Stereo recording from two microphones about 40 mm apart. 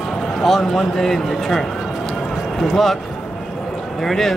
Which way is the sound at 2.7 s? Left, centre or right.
Centre.